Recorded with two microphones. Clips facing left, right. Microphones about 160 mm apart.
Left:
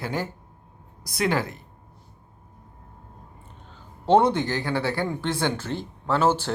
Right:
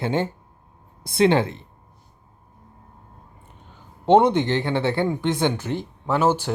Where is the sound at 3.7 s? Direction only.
20° right (ahead or behind).